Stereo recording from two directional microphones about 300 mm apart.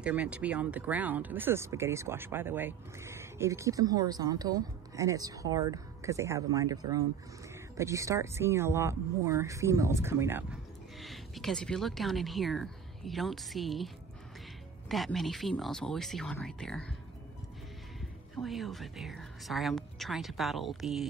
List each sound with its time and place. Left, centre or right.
0.0 s speech: centre
14.9 s speech: centre
18.3 s speech: centre